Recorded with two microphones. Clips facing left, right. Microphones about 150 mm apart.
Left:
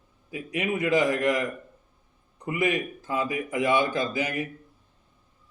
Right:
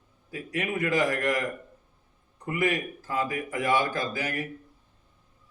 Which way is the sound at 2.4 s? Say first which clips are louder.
Left 1 dB; 20° left (ahead or behind).